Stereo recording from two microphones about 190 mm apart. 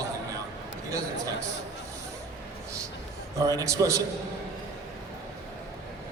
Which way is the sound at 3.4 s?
20° right (ahead or behind).